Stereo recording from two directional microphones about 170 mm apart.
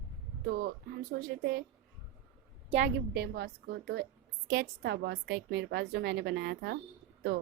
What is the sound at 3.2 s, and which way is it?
A woman's voice, 80° right.